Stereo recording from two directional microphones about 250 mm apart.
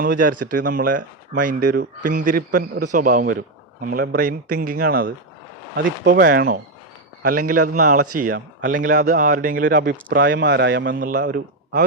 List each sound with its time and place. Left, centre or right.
0.0 s speech: right
6.1 s speech: right